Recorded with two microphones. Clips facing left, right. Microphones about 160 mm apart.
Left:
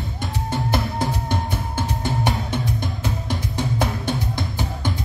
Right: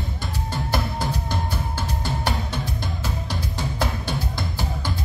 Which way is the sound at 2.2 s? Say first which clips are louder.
Left 3 dB; 20° left (ahead or behind).